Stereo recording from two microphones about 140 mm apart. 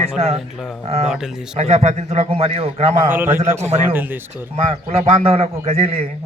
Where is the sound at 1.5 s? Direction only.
50° right (ahead or behind).